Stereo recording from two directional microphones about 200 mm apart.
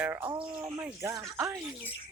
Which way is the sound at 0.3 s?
25° right (ahead or behind).